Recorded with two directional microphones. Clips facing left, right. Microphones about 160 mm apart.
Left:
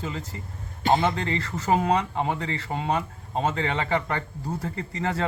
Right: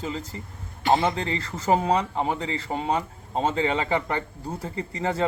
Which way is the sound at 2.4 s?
25° right (ahead or behind).